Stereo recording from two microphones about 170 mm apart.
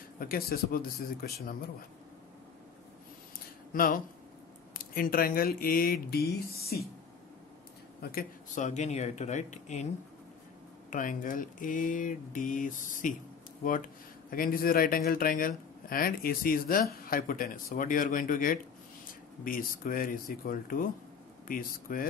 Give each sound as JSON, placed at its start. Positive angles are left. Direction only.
{"t": 0.2, "sound": "speech", "side_deg": 60}
{"t": 3.7, "sound": "speech", "side_deg": 55}
{"t": 8.0, "sound": "speech", "side_deg": 60}
{"t": 10.9, "sound": "speech", "side_deg": 50}
{"t": 14.3, "sound": "speech", "side_deg": 60}